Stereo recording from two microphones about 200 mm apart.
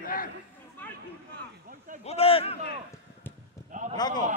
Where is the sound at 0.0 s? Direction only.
45° left (ahead or behind).